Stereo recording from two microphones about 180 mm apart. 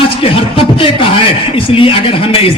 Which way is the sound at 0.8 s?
30° left (ahead or behind).